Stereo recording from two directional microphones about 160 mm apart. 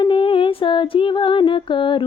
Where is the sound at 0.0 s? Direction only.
35° left (ahead or behind).